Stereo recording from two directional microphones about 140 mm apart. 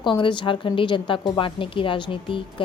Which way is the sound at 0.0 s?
35° left (ahead or behind).